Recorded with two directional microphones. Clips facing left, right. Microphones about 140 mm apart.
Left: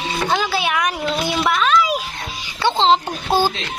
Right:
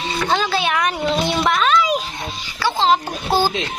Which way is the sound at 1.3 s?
Centre (ahead or behind).